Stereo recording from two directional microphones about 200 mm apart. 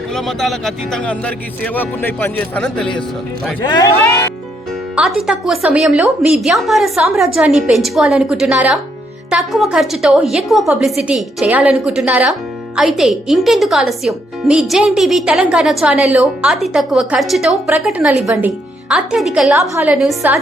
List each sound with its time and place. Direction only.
0.1 s a woman's voice: centre (ahead or behind)
3.8 s speech: 15° left (ahead or behind)
4.9 s a woman's voice: centre (ahead or behind)